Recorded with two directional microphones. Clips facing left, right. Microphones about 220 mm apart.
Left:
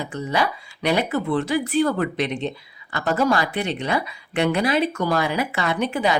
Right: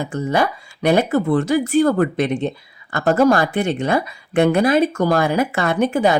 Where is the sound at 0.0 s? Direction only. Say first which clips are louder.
Right 4 dB; 50° right (ahead or behind).